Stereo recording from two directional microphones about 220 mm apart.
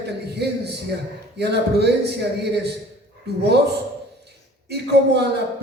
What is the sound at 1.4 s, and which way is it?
Speech, 50° right (ahead or behind).